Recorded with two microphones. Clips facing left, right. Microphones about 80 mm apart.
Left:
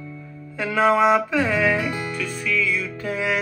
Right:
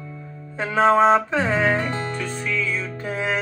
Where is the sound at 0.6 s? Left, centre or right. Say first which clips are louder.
Right 2 dB; right.